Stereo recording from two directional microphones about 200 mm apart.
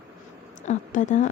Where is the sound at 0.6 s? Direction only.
35° left (ahead or behind).